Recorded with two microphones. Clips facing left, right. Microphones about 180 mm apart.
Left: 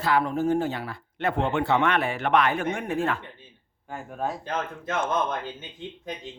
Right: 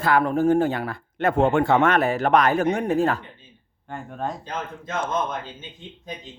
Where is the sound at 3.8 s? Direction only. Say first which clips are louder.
Right 1 dB; 5° left (ahead or behind).